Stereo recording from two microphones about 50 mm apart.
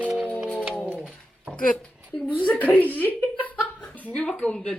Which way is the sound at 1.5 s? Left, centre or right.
Left.